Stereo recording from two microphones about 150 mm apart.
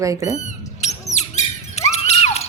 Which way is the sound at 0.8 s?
50° left (ahead or behind).